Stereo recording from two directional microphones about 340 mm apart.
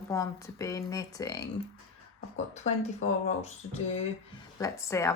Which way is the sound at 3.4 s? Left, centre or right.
Centre.